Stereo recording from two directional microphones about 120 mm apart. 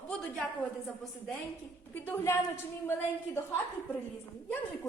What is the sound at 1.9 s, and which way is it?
A woman's voice, 15° left (ahead or behind).